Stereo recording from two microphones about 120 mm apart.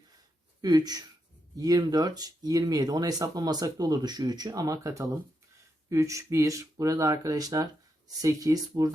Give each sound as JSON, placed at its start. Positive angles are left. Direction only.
{"t": 0.6, "sound": "speech", "side_deg": -30}